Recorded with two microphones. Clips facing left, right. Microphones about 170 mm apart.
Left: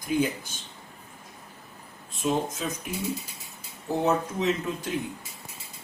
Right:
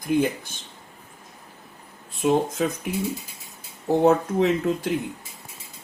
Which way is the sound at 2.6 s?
60° right (ahead or behind).